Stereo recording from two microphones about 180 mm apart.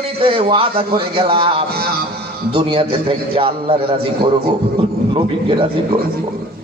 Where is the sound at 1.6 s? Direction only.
60° right (ahead or behind).